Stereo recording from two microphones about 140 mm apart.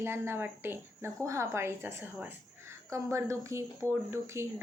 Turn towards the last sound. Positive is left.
turn(degrees=-20)  # may be behind; listen again after turning